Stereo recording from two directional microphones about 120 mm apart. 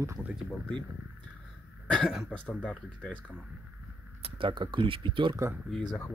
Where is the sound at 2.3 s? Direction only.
10° left (ahead or behind).